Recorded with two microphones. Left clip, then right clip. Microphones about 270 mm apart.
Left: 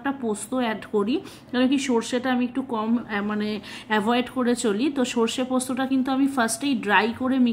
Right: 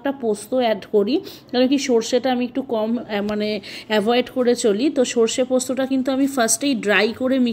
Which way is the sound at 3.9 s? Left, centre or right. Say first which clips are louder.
Right 5 dB; centre.